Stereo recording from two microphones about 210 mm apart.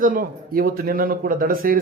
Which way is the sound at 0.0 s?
40° right (ahead or behind).